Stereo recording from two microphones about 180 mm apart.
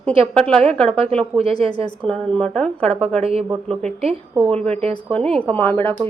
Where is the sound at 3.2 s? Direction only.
35° right (ahead or behind).